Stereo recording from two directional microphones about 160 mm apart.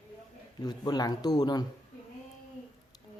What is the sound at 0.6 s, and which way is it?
Speech, 25° left (ahead or behind).